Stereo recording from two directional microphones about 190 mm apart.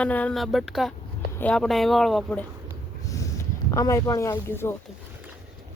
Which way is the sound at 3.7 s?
20° left (ahead or behind).